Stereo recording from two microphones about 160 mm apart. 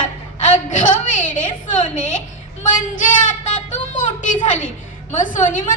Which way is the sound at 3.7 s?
50° left (ahead or behind).